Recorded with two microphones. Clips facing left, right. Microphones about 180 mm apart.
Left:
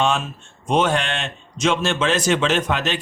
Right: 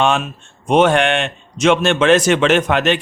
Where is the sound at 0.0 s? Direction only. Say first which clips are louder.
Right 4 dB; 60° right (ahead or behind).